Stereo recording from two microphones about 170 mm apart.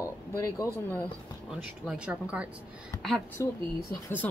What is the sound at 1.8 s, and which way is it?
Speech, 5° right (ahead or behind).